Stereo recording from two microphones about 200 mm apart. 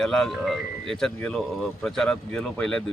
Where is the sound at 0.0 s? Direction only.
Centre (ahead or behind).